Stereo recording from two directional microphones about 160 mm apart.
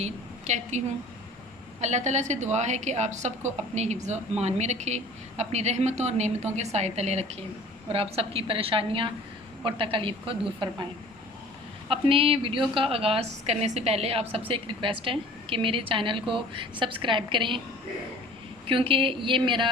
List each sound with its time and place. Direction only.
0.0 s a woman's voice: 45° right (ahead or behind)
1.8 s a woman's voice: 45° right (ahead or behind); by 10.8 s 30° right (ahead or behind)
11.9 s a woman's voice: 35° right (ahead or behind)
18.7 s a woman's voice: 35° right (ahead or behind)